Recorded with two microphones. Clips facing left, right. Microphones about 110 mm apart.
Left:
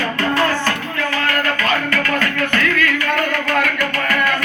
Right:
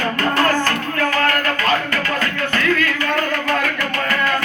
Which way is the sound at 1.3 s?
30° right (ahead or behind).